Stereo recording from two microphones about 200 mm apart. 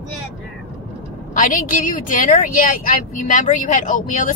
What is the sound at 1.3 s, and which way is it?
Speech, 45° left (ahead or behind).